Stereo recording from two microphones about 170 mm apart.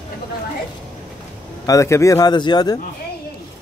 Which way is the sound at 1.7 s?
15° left (ahead or behind).